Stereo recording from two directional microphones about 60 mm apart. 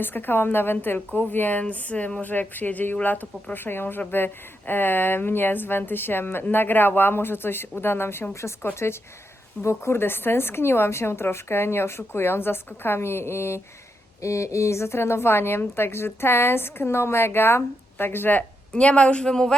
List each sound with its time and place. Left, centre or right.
0.0 s a woman's voice: left
9.6 s a woman's voice: left
14.2 s a woman's voice: left
18.7 s speech: centre